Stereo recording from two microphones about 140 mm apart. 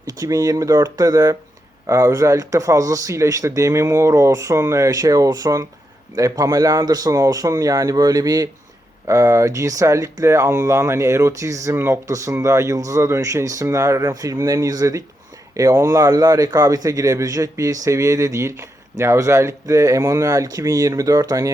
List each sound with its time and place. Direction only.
0.2 s speech: 25° right (ahead or behind)